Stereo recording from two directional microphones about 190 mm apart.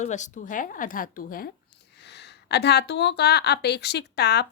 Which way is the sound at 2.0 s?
65° left (ahead or behind).